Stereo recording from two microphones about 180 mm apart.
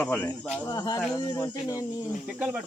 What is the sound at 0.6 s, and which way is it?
Speech, 20° left (ahead or behind).